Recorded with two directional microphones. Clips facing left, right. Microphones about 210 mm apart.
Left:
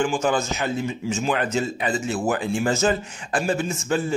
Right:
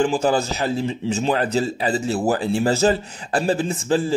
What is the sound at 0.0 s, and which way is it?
A man's voice, 35° right (ahead or behind).